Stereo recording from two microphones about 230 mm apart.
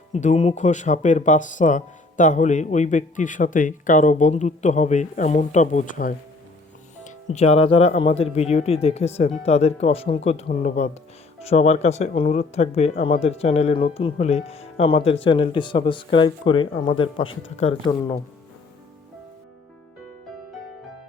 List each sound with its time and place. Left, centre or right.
0.1 s speech: left